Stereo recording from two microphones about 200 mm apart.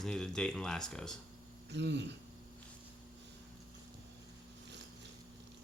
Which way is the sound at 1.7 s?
60° right (ahead or behind).